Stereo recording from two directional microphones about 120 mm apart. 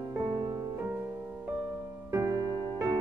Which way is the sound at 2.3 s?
35° right (ahead or behind).